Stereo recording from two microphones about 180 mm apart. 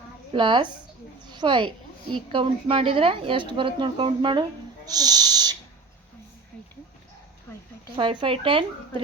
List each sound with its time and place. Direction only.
0.3 s a woman's voice: 25° right (ahead or behind)
1.2 s a sound: 25° right (ahead or behind)
2.1 s a woman's voice: 30° right (ahead or behind)
7.9 s a woman's voice: 30° right (ahead or behind)